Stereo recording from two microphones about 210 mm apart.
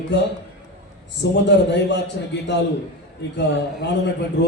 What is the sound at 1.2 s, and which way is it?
A man's voice, 55° left (ahead or behind).